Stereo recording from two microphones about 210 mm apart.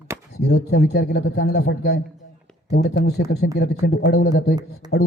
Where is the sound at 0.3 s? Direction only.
50° left (ahead or behind).